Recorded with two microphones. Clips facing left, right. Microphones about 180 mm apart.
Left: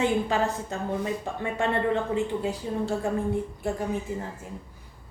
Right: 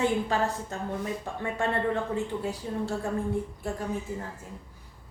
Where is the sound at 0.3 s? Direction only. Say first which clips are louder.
Left 2 dB; 20° left (ahead or behind).